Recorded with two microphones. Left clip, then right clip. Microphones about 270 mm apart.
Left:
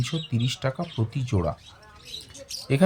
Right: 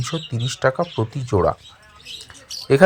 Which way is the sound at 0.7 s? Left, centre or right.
Right.